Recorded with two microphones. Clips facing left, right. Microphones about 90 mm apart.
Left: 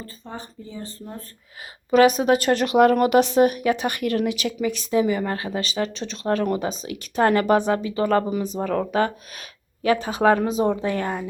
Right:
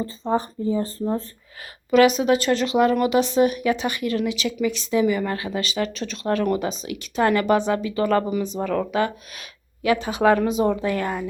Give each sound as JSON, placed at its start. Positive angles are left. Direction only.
{"t": 0.7, "sound": "speech", "side_deg": -40}
{"t": 1.9, "sound": "speech", "side_deg": 45}